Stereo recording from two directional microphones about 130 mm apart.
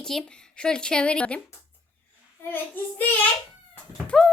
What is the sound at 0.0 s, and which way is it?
Speech, 5° left (ahead or behind).